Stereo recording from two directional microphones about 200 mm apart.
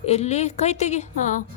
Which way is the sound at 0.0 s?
35° left (ahead or behind).